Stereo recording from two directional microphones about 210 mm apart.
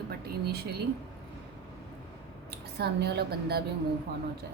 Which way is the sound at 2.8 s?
50° right (ahead or behind).